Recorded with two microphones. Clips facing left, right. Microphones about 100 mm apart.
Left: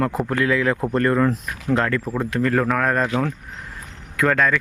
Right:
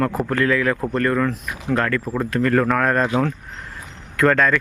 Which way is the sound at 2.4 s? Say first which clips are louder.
Right 2 dB; 5° left (ahead or behind).